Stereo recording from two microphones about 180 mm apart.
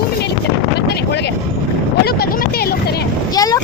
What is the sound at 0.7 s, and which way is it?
Vehicle, 65° left (ahead or behind).